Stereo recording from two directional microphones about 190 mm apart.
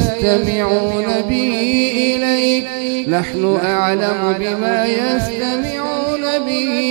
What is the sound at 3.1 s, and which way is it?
Speech, 20° right (ahead or behind).